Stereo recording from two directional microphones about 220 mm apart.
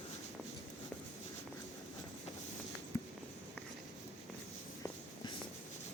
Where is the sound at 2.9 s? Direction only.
15° left (ahead or behind).